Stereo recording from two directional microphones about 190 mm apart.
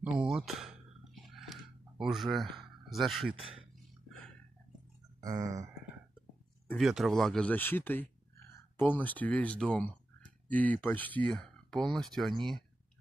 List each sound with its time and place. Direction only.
0.0 s speech: 5° right (ahead or behind)
1.3 s a sound: centre (ahead or behind)
5.2 s speech: 15° right (ahead or behind)
6.7 s speech: centre (ahead or behind)